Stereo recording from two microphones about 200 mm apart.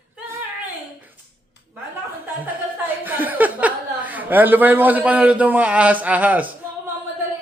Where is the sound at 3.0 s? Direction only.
10° right (ahead or behind).